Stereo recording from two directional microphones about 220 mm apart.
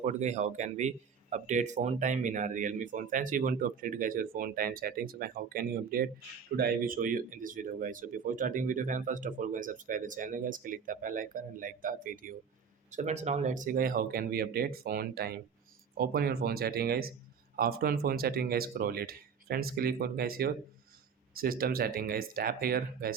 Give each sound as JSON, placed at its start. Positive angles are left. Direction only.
{"t": 0.0, "sound": "speech", "side_deg": -30}